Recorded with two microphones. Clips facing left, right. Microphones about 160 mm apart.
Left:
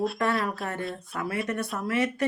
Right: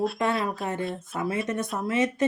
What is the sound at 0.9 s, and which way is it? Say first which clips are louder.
Speech: right 3 dB; 20° right (ahead or behind).